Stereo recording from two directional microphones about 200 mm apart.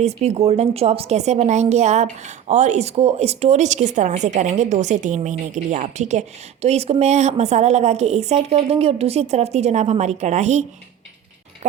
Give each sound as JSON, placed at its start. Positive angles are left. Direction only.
{"t": 0.0, "sound": "a woman's voice", "side_deg": -35}